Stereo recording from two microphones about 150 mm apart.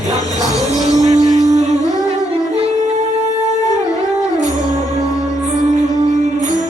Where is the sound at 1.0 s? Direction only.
50° right (ahead or behind).